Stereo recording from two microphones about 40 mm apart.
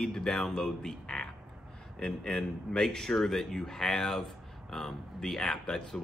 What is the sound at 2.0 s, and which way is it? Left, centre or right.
A man's voice, centre.